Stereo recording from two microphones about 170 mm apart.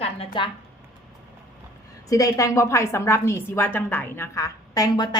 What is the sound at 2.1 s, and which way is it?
A woman's voice, 20° left (ahead or behind).